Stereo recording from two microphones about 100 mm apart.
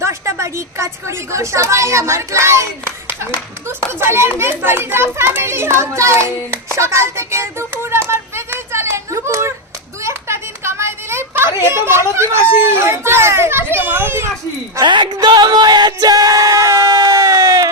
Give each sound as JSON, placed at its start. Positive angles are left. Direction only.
{"t": 0.0, "sound": "a woman's voice", "side_deg": -30}
{"t": 3.9, "sound": "a child's voice", "side_deg": -25}
{"t": 10.0, "sound": "a sound", "side_deg": -25}
{"t": 14.8, "sound": "music", "side_deg": -50}